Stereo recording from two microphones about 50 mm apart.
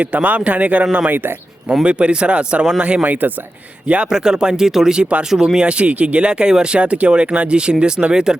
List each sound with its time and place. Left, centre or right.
0.0 s speech: right
3.0 s speech: right
4.1 s speech: centre; by 6.2 s right
6.2 s speech: centre